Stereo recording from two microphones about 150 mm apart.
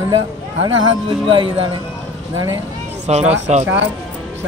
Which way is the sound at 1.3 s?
35° right (ahead or behind).